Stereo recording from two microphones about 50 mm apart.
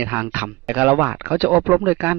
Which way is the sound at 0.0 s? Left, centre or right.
Right.